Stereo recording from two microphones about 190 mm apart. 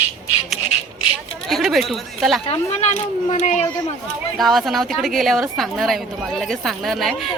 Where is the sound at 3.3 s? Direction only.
35° left (ahead or behind).